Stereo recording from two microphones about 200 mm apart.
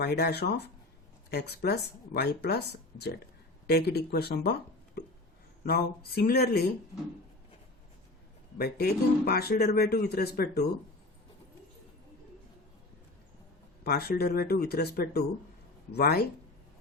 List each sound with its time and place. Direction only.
0.0 s speech: 55° left (ahead or behind)
3.7 s speech: 50° left (ahead or behind)
5.6 s speech: 50° left (ahead or behind)
8.5 s speech: 50° left (ahead or behind)
13.8 s speech: 50° left (ahead or behind)